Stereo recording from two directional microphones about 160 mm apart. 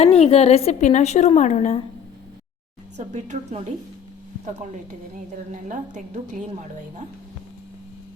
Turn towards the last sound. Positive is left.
turn(degrees=-50)  # may be behind; listen again after turning